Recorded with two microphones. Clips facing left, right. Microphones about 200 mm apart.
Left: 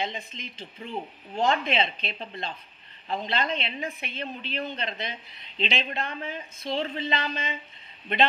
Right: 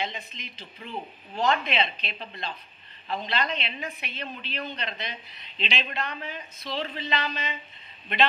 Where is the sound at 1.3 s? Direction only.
25° left (ahead or behind).